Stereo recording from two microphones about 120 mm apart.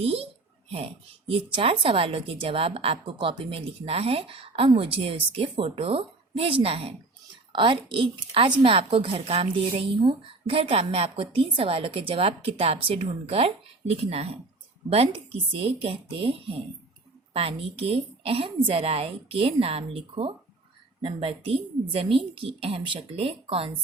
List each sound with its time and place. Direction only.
0.0 s a child's voice: 55° right (ahead or behind)